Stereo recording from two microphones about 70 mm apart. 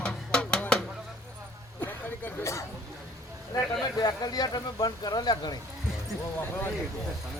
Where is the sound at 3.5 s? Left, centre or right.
Left.